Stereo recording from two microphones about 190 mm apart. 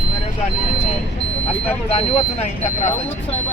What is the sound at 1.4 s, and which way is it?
Speech, 35° left (ahead or behind).